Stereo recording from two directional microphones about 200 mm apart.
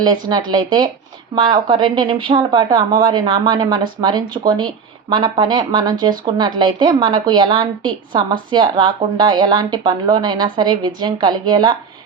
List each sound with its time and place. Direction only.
0.0 s a woman's voice: 20° right (ahead or behind)